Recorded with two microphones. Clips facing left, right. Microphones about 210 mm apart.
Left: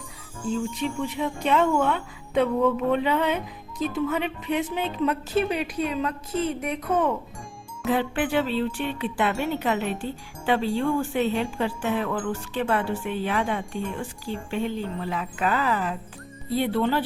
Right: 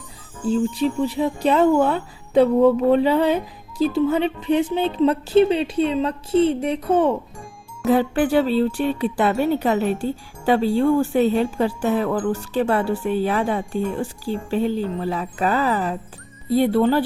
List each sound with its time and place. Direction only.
0.4 s speech: 35° right (ahead or behind)